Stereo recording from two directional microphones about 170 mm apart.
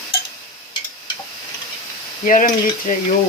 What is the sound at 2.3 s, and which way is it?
Sizzle, 50° left (ahead or behind).